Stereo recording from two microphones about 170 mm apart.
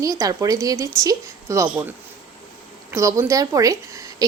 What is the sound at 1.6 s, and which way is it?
Speech, 5° right (ahead or behind).